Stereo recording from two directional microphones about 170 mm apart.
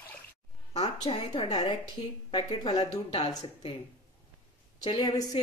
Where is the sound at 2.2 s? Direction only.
25° left (ahead or behind).